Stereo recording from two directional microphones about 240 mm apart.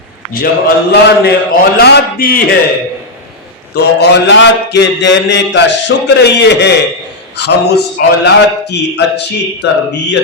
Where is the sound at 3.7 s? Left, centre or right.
Left.